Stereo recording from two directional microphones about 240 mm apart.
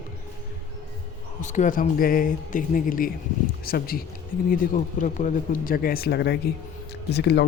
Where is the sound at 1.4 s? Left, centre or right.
Left.